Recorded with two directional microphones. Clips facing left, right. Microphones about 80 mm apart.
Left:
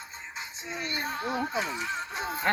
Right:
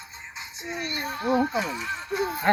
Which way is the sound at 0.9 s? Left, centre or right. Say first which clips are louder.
Right 6 dB; left.